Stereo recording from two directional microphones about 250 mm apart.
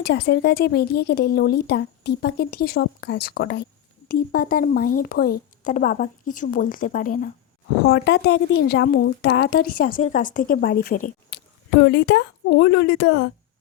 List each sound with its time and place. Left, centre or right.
0.0 s a woman's voice: left